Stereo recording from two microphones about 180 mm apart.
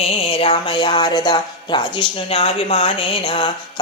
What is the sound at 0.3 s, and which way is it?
Speech, 30° left (ahead or behind).